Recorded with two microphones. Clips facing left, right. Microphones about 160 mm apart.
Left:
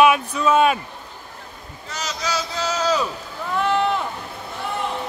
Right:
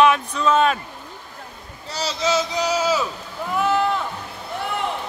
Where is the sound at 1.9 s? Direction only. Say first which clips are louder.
Right 5 dB; 30° right (ahead or behind); by 3.8 s 5° right (ahead or behind).